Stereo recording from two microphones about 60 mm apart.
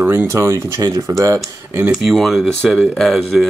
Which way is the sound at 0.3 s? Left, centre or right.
Right.